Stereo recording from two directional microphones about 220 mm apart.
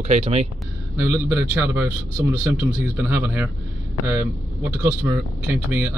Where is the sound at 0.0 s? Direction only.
30° right (ahead or behind).